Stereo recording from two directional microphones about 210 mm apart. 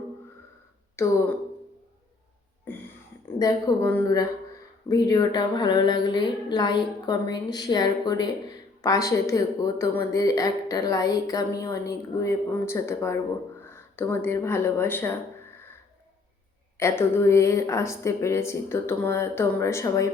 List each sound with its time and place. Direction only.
1.0 s speech: 10° left (ahead or behind)
2.7 s a sound: 10° left (ahead or behind)
3.2 s speech: 15° left (ahead or behind)
16.7 s speech: 10° left (ahead or behind)